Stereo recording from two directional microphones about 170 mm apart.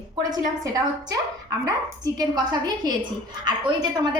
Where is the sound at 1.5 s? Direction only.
20° right (ahead or behind).